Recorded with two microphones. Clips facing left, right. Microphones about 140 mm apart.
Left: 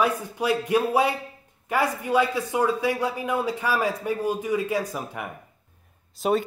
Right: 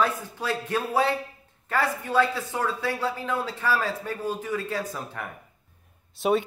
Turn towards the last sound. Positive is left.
turn(degrees=0)  # may be behind; listen again after turning